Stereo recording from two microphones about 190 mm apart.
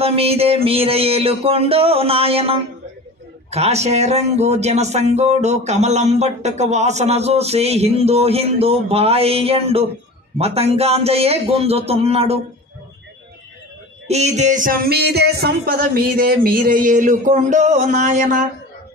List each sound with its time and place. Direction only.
0.0 s speech: 30° right (ahead or behind)
14.0 s music: 35° right (ahead or behind)